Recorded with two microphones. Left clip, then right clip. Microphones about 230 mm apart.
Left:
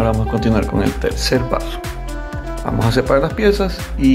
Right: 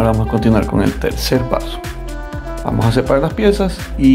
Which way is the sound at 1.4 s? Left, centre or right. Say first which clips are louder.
Right 1 dB; centre.